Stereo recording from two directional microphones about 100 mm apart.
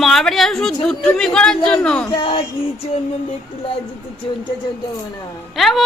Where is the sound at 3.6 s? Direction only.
65° left (ahead or behind).